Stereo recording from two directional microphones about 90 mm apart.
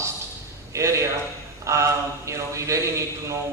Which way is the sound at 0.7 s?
30° right (ahead or behind).